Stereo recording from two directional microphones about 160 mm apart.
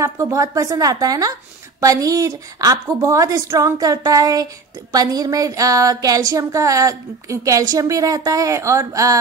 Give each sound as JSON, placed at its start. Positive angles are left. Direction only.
{"t": 0.0, "sound": "speech", "side_deg": -20}